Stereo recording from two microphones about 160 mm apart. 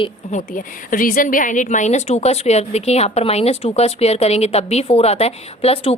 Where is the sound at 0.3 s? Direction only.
55° left (ahead or behind).